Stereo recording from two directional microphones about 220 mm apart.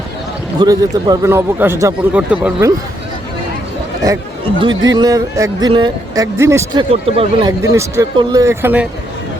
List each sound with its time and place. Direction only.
0.6 s speech: 15° right (ahead or behind)
4.0 s speech: 15° right (ahead or behind)
6.9 s speech: 25° right (ahead or behind); by 8.9 s 10° right (ahead or behind)